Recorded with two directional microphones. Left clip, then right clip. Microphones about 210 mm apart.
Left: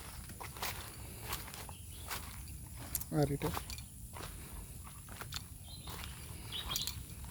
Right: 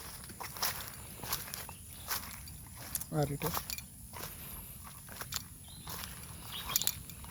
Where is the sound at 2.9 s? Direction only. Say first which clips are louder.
Left 1 dB; 25° left (ahead or behind).